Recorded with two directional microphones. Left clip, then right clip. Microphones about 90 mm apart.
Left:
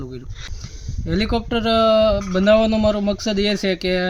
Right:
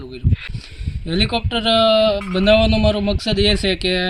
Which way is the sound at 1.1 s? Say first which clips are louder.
Right 2 dB; 25° left (ahead or behind).